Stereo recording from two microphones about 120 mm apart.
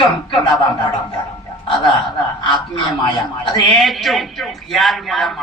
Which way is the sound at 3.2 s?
40° left (ahead or behind).